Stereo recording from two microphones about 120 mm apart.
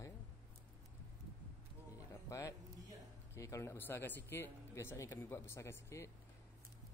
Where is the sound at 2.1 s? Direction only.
25° left (ahead or behind).